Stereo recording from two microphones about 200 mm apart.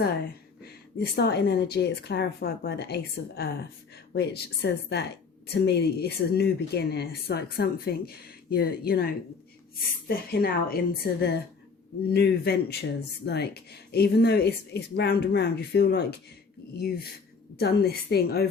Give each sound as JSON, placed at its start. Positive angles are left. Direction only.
{"t": 0.6, "sound": "a woman's voice", "side_deg": 55}
{"t": 17.6, "sound": "a woman's voice", "side_deg": 55}